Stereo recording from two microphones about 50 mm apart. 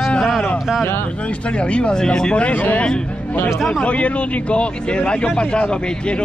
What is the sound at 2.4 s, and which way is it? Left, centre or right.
Speech, left.